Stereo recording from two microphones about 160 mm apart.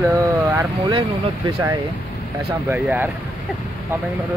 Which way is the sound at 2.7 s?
10° right (ahead or behind).